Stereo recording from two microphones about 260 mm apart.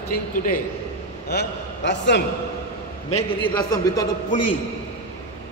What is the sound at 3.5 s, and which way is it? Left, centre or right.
Speech, centre.